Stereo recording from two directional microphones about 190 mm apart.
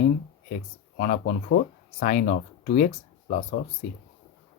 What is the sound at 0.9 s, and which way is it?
Speech, 50° left (ahead or behind).